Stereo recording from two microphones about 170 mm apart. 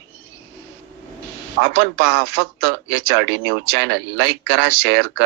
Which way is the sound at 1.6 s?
90° right.